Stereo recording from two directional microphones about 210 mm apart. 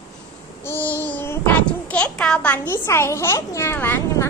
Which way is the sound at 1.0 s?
10° left (ahead or behind).